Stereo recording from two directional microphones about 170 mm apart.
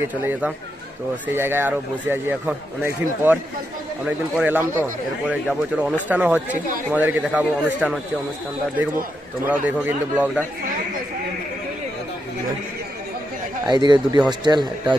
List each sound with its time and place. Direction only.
0.1 s a man's voice: 10° right (ahead or behind)
4.4 s a man's voice: 10° right (ahead or behind)
9.5 s a man's voice: 10° right (ahead or behind)
13.7 s a man's voice: 25° right (ahead or behind)